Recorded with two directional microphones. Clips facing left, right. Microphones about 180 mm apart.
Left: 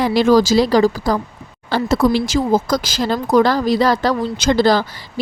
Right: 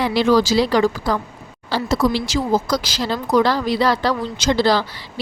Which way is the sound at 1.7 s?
55° left (ahead or behind).